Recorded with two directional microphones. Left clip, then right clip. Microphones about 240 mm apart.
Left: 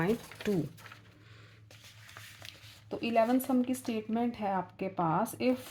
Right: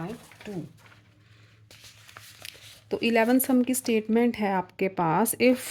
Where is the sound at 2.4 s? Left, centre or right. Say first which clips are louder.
Right 5 dB; right.